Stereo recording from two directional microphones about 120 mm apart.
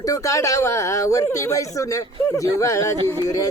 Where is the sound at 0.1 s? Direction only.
25° left (ahead or behind).